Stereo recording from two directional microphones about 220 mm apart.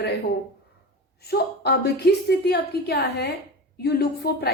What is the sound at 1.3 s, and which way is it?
A woman's voice, 45° left (ahead or behind).